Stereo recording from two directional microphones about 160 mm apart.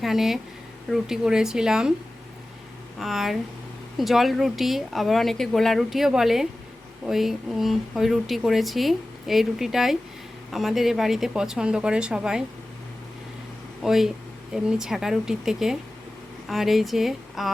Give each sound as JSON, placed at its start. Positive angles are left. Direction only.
{"t": 0.0, "sound": "speech", "side_deg": 0}
{"t": 3.0, "sound": "speech", "side_deg": 0}
{"t": 13.8, "sound": "speech", "side_deg": 0}